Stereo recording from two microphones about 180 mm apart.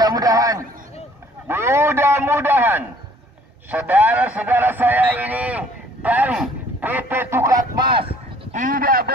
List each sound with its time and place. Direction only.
0.0 s a sound: 20° right (ahead or behind)
1.5 s a man's voice: 15° right (ahead or behind)
8.5 s fowl: 50° right (ahead or behind)